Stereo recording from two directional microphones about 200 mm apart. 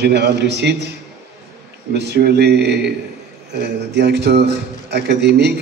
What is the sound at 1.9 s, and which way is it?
Speech, 55° right (ahead or behind).